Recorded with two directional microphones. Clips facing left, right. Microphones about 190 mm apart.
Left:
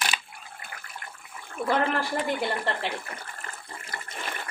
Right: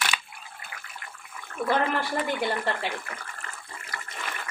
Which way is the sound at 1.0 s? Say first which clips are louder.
Left 1 dB; 40° left (ahead or behind).